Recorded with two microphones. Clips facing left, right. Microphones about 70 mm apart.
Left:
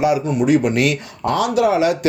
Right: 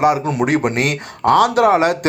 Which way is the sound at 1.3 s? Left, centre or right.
Right.